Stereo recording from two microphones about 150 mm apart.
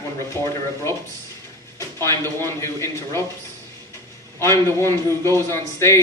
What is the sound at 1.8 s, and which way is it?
A man's voice, 20° left (ahead or behind).